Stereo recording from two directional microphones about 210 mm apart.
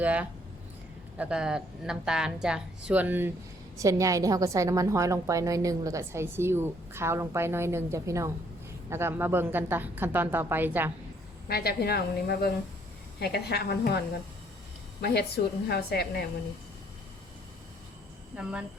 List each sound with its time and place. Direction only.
0.0 s a woman's voice: 5° right (ahead or behind)
11.4 s speech: 45° left (ahead or behind)
15.0 s speech: 50° left (ahead or behind)
18.3 s speech: 5° right (ahead or behind)